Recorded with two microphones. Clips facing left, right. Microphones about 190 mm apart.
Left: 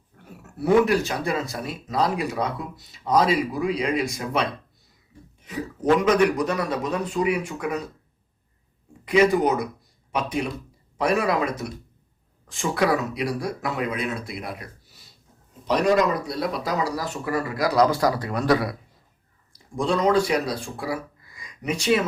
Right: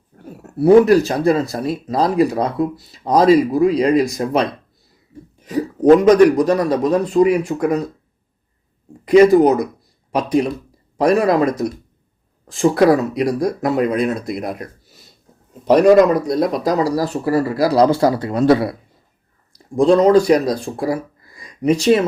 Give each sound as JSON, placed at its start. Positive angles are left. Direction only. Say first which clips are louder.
{"t": 0.2, "sound": "speech", "louder": "right 12 dB", "side_deg": -35}
{"t": 9.0, "sound": "speech", "louder": "right 9 dB", "side_deg": -40}
{"t": 19.7, "sound": "speech", "louder": "right 9 dB", "side_deg": -35}